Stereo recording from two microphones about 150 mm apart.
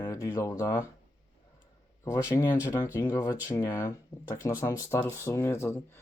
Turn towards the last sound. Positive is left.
turn(degrees=15)  # may be behind; listen again after turning